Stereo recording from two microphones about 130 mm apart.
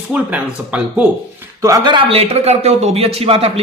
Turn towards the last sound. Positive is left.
turn(degrees=-50)  # may be behind; listen again after turning